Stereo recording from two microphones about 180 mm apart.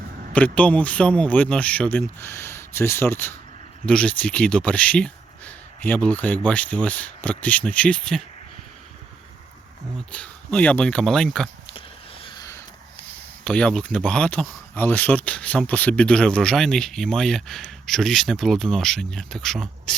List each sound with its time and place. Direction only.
0.3 s speech: 10° left (ahead or behind)
10.1 s speech: 5° left (ahead or behind)
12.2 s a sound: 20° left (ahead or behind)
13.4 s speech: 5° left (ahead or behind)